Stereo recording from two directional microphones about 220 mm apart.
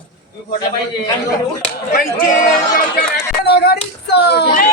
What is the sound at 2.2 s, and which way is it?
A man's voice, 40° left (ahead or behind).